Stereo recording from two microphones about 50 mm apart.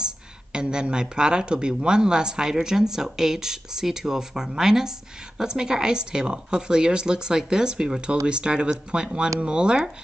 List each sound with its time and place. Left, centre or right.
0.0 s speech: centre